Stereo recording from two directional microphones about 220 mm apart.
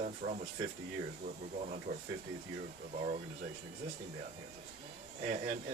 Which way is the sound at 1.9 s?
35° right (ahead or behind).